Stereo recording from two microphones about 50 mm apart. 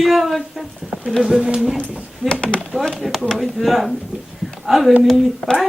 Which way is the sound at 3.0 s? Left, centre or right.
Centre.